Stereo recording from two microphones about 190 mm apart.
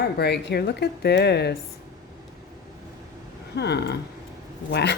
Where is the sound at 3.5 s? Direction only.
60° left (ahead or behind).